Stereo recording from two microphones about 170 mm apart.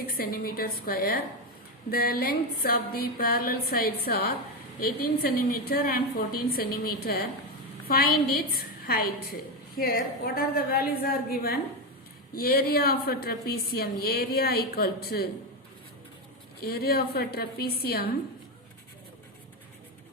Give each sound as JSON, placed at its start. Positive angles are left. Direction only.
{"t": 0.1, "sound": "music", "side_deg": 60}
{"t": 16.6, "sound": "music", "side_deg": 65}